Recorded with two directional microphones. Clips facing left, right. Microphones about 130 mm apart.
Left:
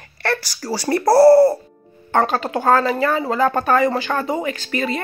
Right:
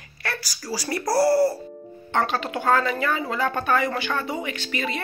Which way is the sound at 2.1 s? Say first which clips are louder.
Left 6 dB; 45° left (ahead or behind).